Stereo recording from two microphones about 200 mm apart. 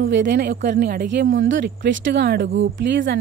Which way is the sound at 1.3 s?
65° right (ahead or behind).